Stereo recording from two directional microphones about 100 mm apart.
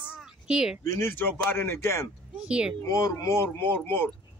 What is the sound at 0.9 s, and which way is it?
Speech, 20° left (ahead or behind).